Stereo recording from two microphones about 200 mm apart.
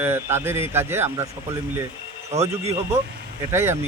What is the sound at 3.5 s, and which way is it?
Speech, 10° right (ahead or behind).